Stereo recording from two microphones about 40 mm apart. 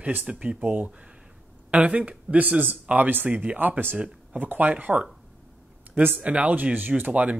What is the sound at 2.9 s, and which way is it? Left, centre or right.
Speech, right.